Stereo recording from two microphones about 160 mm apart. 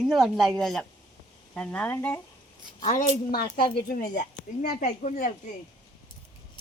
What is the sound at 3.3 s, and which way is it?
A woman's voice, 70° left (ahead or behind).